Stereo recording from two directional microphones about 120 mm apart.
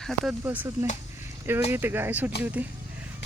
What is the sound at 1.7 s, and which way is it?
Speech, 15° right (ahead or behind).